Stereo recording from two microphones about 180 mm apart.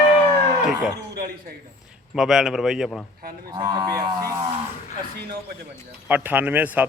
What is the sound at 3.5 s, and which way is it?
Cattle, 20° right (ahead or behind).